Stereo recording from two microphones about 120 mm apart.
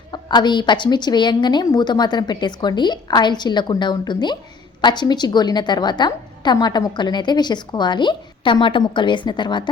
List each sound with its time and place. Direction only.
0.1 s a woman's voice: 35° left (ahead or behind)